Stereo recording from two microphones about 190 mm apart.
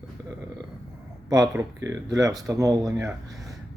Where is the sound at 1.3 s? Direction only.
20° right (ahead or behind).